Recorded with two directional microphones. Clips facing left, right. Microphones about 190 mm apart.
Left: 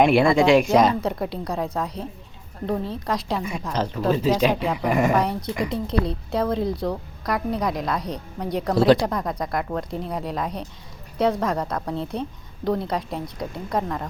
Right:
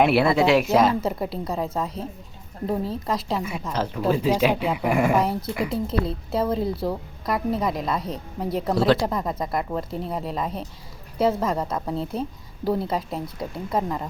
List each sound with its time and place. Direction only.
0.0 s a woman's voice: 5° right (ahead or behind)